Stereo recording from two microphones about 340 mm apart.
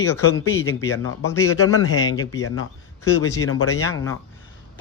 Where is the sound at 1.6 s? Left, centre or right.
Left.